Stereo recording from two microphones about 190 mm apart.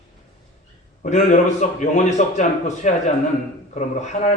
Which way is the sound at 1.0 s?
40° left (ahead or behind).